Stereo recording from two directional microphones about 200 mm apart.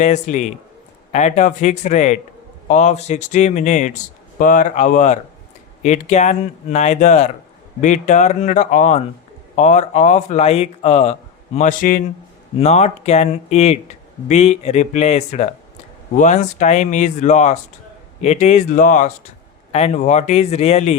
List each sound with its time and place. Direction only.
0.0 s speech: 35° left (ahead or behind)
12.5 s speech: 35° left (ahead or behind)